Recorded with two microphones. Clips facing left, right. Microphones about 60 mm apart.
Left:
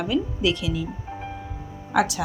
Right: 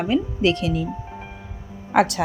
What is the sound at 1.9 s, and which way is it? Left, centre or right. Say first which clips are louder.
Speech: right 4 dB; right.